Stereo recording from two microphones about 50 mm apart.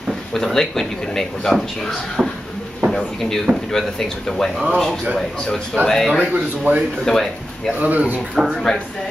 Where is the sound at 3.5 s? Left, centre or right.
Right.